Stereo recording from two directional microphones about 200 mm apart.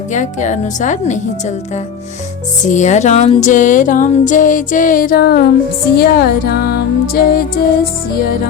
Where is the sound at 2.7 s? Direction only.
35° left (ahead or behind).